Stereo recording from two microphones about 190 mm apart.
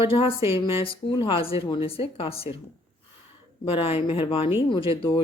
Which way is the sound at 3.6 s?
30° left (ahead or behind).